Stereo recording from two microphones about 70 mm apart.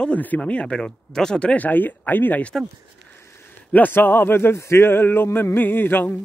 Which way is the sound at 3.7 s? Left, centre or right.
Left.